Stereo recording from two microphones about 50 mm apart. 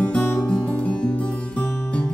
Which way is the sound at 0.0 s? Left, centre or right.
Left.